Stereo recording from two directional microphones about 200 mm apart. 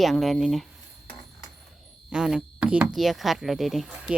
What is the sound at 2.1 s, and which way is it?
A woman's voice, centre (ahead or behind).